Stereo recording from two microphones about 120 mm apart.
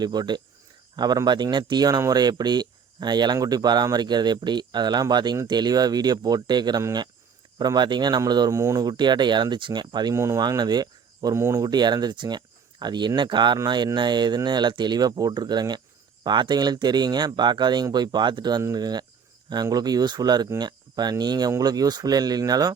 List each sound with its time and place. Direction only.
0.0 s speech: 35° right (ahead or behind)
10.2 s speech: 25° right (ahead or behind)